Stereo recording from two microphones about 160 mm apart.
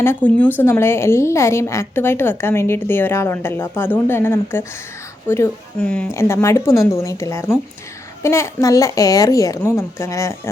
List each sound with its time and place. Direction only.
0.0 s a woman's voice: 10° left (ahead or behind)
6.1 s a woman's voice: 15° left (ahead or behind)